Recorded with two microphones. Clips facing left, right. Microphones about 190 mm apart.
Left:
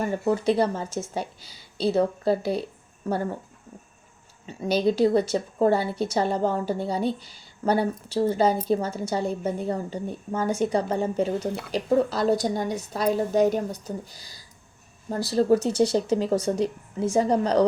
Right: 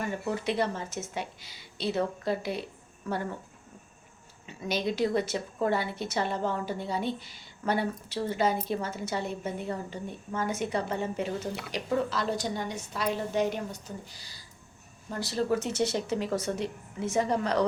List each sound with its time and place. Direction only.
0.0 s a woman's voice: 35° left (ahead or behind)
4.4 s a woman's voice: 35° left (ahead or behind)